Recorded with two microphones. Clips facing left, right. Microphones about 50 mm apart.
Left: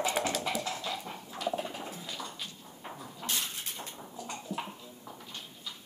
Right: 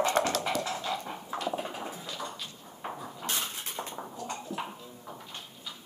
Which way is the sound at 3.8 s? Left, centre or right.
Right.